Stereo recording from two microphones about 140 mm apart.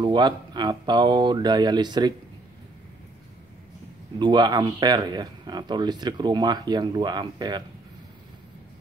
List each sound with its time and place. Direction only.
0.0 s speech: 30° right (ahead or behind)
4.2 s speech: 30° right (ahead or behind)